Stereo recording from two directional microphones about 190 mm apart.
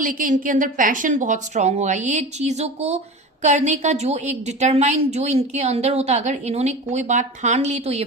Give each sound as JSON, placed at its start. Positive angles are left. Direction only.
{"t": 0.0, "sound": "a woman's voice", "side_deg": -45}